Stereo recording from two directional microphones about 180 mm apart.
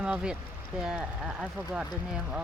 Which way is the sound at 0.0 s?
5° right (ahead or behind).